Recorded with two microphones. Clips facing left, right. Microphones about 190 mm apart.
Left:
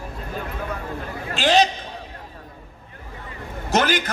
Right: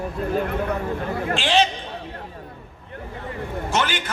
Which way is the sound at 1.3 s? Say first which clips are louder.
Left 3 dB; 40° left (ahead or behind).